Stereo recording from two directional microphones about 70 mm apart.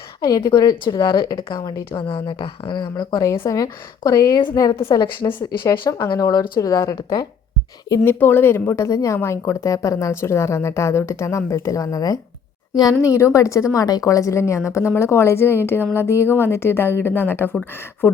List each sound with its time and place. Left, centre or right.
0.3 s a woman's voice: left
1.5 s a woman's voice: left
2.3 s speech: left
3.2 s a woman's voice: left
4.5 s a woman's voice: left
8.0 s speech: left
9.5 s a woman's voice: left
13.0 s a woman's voice: left
13.7 s a woman's voice: left